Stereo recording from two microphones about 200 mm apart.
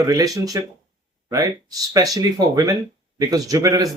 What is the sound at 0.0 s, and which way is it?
Speech, 20° right (ahead or behind).